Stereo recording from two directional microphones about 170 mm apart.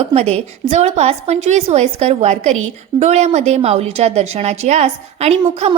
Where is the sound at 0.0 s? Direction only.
35° right (ahead or behind).